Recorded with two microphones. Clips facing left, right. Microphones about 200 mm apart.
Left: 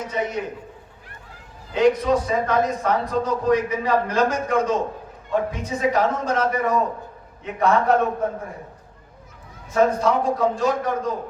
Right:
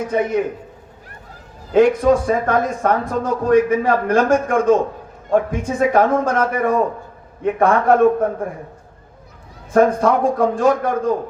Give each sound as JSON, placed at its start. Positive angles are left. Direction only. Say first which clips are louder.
{"t": 0.1, "sound": "speech", "louder": "right 8 dB", "side_deg": -55}
{"t": 1.7, "sound": "speech", "louder": "right 5 dB", "side_deg": -50}
{"t": 9.7, "sound": "speech", "louder": "right 4 dB", "side_deg": -50}